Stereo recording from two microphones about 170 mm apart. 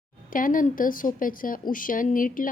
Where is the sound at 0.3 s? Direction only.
55° left (ahead or behind).